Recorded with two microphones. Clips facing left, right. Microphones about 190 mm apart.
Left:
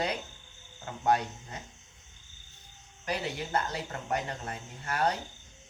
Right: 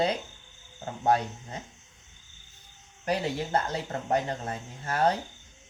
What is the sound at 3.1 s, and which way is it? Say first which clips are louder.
Speech: right 5 dB; 35° right (ahead or behind).